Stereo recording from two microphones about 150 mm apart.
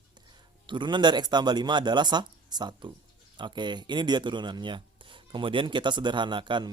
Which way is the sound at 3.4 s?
30° right (ahead or behind).